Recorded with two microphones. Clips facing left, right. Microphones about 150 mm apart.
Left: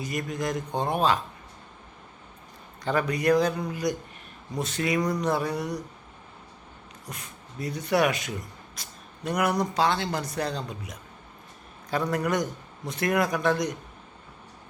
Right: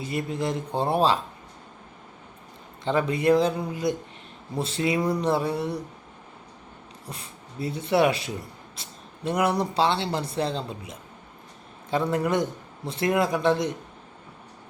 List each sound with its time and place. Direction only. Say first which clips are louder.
0.0 s speech: right 2 dB; 30° right (ahead or behind)
2.8 s speech: right 2 dB; 25° right (ahead or behind)
7.1 s speech: right 1 dB; 30° right (ahead or behind)